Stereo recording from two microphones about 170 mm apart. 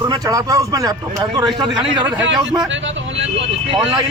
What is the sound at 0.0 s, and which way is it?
Speech, 20° right (ahead or behind).